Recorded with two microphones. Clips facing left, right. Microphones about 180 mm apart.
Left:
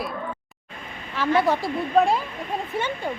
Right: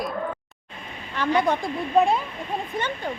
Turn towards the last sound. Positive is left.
turn(degrees=10)  # may be behind; listen again after turning